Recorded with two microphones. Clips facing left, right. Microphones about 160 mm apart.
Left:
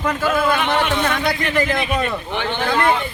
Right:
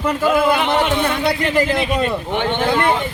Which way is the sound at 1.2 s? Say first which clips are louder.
Right 3 dB; 30° right (ahead or behind).